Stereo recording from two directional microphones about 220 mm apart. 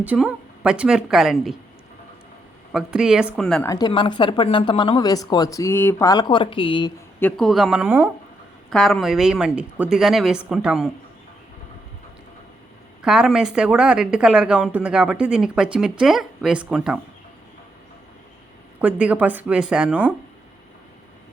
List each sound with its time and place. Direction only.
0.0 s speech: 5° right (ahead or behind)
2.7 s speech: 5° right (ahead or behind)
3.7 s speech: 20° left (ahead or behind)
7.2 s speech: 5° left (ahead or behind)
13.0 s speech: 5° right (ahead or behind)
18.8 s speech: 5° right (ahead or behind)